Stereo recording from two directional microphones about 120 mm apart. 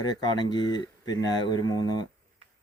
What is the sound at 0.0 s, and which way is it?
Speech, 35° left (ahead or behind).